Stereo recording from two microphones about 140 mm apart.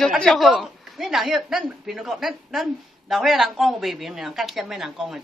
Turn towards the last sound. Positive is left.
turn(degrees=0)  # may be behind; listen again after turning